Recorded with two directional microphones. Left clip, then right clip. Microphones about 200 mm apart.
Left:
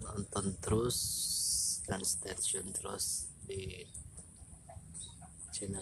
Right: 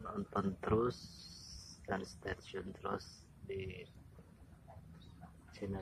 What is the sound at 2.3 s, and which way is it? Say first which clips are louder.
Speech: left 3 dB; 5° left (ahead or behind).